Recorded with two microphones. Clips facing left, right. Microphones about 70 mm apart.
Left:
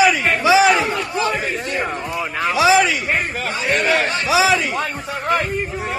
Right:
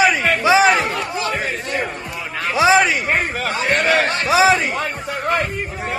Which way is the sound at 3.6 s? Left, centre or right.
Right.